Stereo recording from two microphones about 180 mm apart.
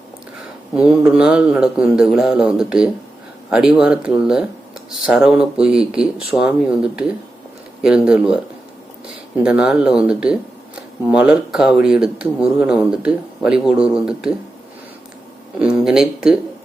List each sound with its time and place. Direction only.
0.8 s speech: 5° right (ahead or behind)
9.4 s speech: 5° right (ahead or behind)
15.5 s speech: 5° right (ahead or behind)